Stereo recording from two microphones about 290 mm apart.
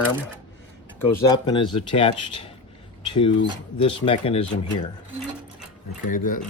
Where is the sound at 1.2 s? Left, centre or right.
Centre.